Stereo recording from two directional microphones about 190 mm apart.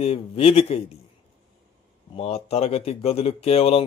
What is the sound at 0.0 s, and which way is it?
Speech, 30° left (ahead or behind).